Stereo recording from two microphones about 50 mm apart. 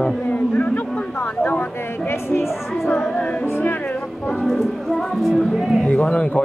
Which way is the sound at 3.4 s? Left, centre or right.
Left.